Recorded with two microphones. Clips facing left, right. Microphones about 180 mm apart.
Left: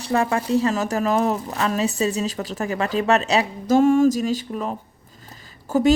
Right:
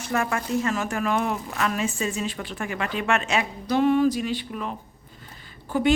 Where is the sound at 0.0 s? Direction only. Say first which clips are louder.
Left 5 dB; 30° left (ahead or behind).